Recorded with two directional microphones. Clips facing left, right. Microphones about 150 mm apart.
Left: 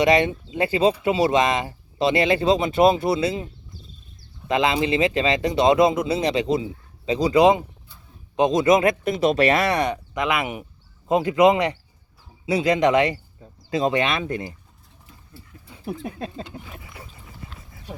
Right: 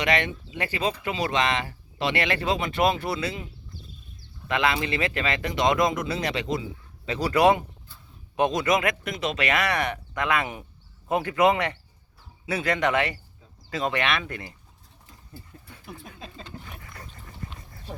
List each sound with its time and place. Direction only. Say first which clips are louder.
0.1 s speech: left 7 dB; 25° left (ahead or behind)
2.0 s speech: left 7 dB; 30° left (ahead or behind)
4.4 s speech: left 5 dB; 25° left (ahead or behind)
15.9 s speech: left 12 dB; 60° left (ahead or behind)
16.4 s wild animals: left 5 dB; 15° left (ahead or behind)